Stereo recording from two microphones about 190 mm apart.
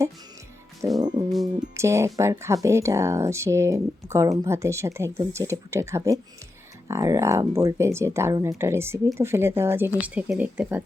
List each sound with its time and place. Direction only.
0.8 s speech: 15° right (ahead or behind)